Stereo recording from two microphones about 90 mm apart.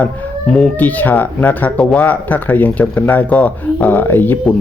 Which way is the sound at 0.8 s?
20° left (ahead or behind).